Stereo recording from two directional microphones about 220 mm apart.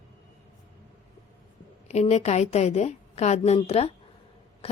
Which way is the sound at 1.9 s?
30° left (ahead or behind).